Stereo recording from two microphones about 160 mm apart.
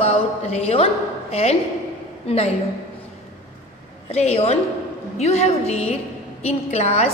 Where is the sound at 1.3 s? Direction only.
40° left (ahead or behind).